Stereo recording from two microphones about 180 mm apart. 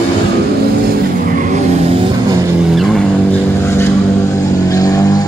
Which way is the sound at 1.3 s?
45° right (ahead or behind).